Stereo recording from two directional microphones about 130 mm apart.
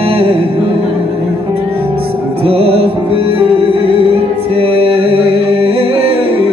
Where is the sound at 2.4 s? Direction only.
45° right (ahead or behind).